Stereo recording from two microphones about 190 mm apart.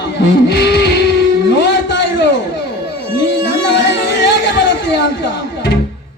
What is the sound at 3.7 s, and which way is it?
Music, 65° left (ahead or behind).